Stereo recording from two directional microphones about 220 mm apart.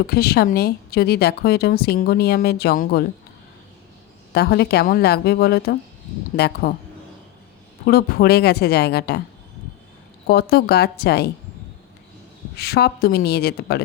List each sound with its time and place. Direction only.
0.1 s speech: 45° left (ahead or behind)
4.3 s speech: 45° left (ahead or behind)
7.9 s speech: 45° left (ahead or behind)
10.2 s speech: 45° left (ahead or behind)
12.5 s speech: 45° left (ahead or behind)